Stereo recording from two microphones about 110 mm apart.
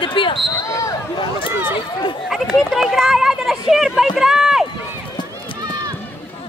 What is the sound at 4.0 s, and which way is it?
Run, 5° right (ahead or behind).